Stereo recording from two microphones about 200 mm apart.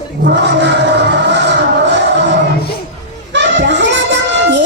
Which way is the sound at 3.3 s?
60° right (ahead or behind).